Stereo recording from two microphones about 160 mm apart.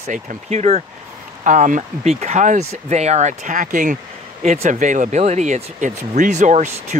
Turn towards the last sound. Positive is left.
turn(degrees=-45)  # may be behind; listen again after turning